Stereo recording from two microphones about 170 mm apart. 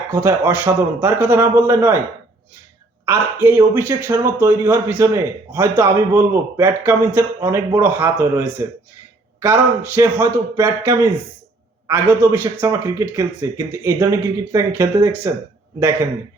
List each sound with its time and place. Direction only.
0.1 s speech: 15° right (ahead or behind)
3.1 s speech: 15° right (ahead or behind)